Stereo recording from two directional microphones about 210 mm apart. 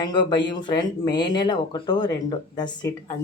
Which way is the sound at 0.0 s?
20° left (ahead or behind).